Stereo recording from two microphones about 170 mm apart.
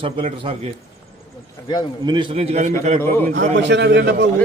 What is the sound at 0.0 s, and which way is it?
Speech, 35° right (ahead or behind).